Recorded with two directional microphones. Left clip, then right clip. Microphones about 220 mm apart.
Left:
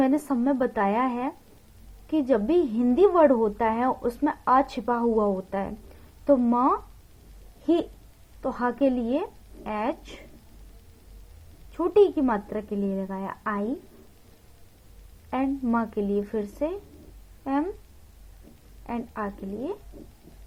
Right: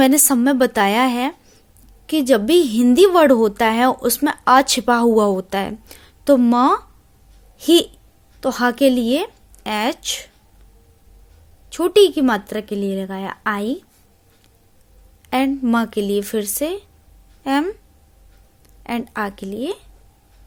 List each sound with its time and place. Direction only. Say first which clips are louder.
0.0 s a woman's voice: right 9 dB; 40° right (ahead or behind)
8.4 s a woman's voice: right 9 dB; 35° right (ahead or behind)
11.7 s a woman's voice: right 7 dB; 40° right (ahead or behind)
15.3 s a woman's voice: right 8 dB; 40° right (ahead or behind)
18.8 s speech: right 8 dB; 45° right (ahead or behind)